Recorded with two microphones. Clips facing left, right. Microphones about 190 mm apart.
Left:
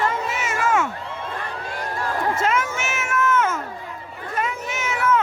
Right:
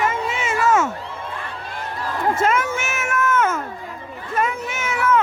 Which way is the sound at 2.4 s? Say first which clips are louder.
Right 3 dB; 50° right (ahead or behind).